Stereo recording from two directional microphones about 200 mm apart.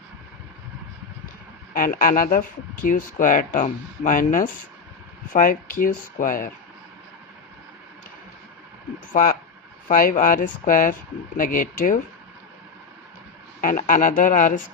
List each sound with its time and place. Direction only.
1.7 s speech: 45° left (ahead or behind)
9.9 s speech: 45° left (ahead or behind)
13.6 s speech: 40° left (ahead or behind)